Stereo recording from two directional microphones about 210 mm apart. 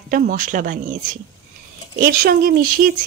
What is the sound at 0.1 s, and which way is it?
Speech, 40° right (ahead or behind).